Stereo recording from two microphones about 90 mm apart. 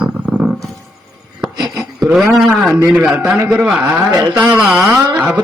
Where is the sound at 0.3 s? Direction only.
35° right (ahead or behind).